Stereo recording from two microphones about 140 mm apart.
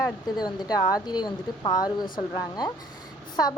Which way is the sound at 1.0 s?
30° left (ahead or behind).